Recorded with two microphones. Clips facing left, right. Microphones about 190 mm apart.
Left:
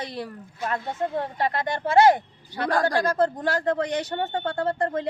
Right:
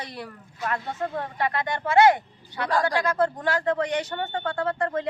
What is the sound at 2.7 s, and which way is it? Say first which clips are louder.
Speech: left 1 dB; 50° left (ahead or behind).